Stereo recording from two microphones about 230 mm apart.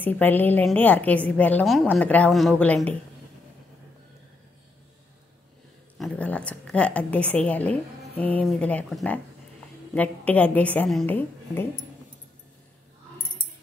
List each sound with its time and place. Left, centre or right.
0.0 s a woman's voice: centre
5.9 s a woman's voice: centre